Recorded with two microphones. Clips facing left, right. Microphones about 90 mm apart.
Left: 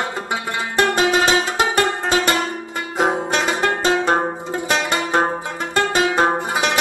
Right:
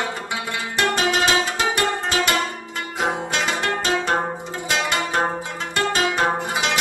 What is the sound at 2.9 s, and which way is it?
Music, 35° left (ahead or behind).